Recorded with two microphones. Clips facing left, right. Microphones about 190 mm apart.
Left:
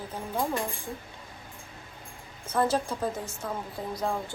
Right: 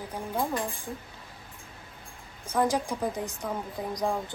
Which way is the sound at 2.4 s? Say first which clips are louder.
Even; 10° right (ahead or behind).